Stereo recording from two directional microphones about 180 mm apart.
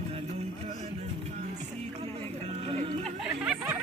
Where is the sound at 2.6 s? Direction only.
35° right (ahead or behind).